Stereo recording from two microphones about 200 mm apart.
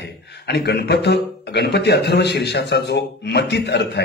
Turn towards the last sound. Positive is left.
turn(degrees=55)  # may be behind; listen again after turning